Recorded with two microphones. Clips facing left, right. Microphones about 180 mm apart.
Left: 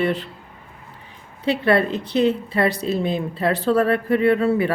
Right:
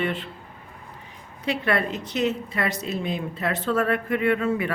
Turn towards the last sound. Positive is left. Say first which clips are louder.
# left 5 dB
turn(degrees=35)  # may be behind; listen again after turning